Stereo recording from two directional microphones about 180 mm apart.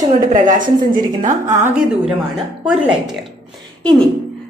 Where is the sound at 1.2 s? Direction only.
45° right (ahead or behind).